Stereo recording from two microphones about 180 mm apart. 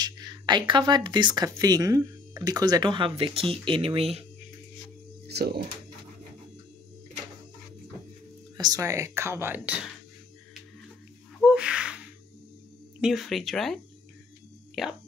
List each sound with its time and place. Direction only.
0.0 s speech: 25° right (ahead or behind)
5.3 s speech: 65° right (ahead or behind)
8.5 s speech: 20° right (ahead or behind)
11.3 s gasp: 5° right (ahead or behind)
13.0 s speech: centre (ahead or behind)
14.8 s speech: centre (ahead or behind)